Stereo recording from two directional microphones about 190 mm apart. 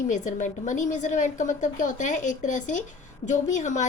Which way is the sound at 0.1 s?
40° left (ahead or behind).